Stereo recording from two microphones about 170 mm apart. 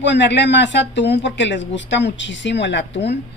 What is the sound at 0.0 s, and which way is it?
Speech, 90° left.